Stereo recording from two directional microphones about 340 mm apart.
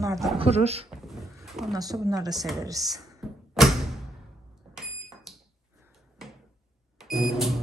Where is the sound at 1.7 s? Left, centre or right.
Centre.